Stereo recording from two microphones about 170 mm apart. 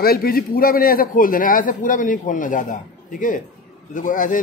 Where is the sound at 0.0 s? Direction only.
60° left (ahead or behind).